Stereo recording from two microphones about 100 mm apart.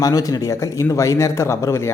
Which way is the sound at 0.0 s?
35° left (ahead or behind).